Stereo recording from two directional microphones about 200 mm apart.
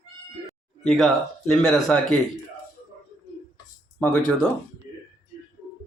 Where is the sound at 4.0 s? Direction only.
5° left (ahead or behind).